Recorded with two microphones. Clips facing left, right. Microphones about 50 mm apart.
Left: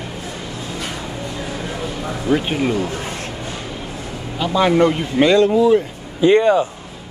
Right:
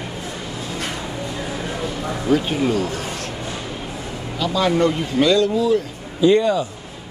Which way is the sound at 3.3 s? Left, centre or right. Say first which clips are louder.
Even; centre.